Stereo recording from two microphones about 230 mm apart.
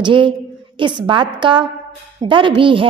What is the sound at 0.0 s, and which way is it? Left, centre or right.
A woman's voice, right.